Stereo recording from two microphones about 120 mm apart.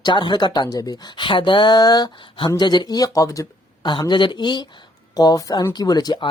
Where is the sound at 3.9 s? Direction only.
40° left (ahead or behind).